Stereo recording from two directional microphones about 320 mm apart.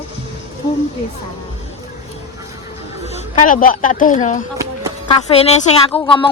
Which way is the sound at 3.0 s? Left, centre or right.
Left.